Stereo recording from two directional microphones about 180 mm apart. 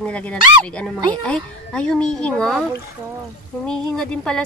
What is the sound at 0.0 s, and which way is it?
A child's voice, 5° left (ahead or behind).